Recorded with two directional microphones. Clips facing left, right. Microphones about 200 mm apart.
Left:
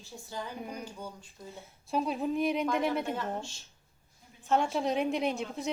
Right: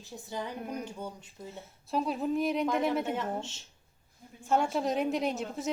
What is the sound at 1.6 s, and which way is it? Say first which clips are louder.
A woman's voice: even; centre (ahead or behind).